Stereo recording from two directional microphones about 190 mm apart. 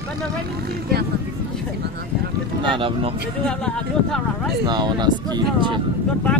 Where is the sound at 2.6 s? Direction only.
25° right (ahead or behind).